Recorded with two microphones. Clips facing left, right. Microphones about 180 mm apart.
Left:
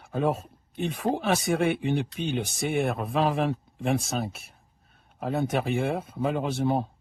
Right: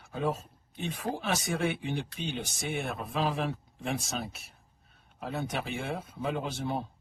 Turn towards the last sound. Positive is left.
turn(degrees=55)  # may be behind; listen again after turning